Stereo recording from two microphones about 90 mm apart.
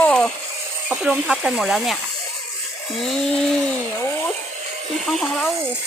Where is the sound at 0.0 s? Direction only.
10° left (ahead or behind).